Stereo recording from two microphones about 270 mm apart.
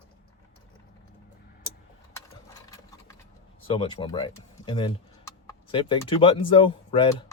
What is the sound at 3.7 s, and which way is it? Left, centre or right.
Speech, centre.